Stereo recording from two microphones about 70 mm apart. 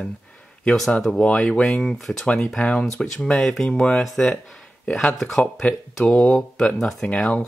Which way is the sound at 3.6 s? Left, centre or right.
Centre.